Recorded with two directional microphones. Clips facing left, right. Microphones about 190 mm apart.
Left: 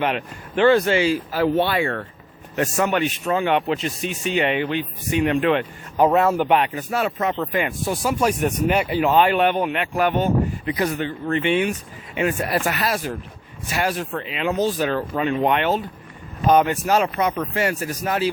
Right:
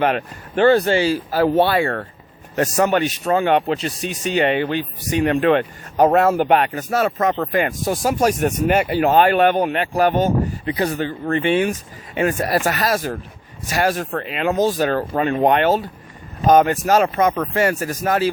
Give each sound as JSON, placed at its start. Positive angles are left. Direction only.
{"t": 0.0, "sound": "speech", "side_deg": -45}